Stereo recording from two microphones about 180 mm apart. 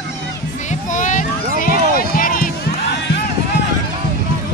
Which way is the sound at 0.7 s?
45° left (ahead or behind).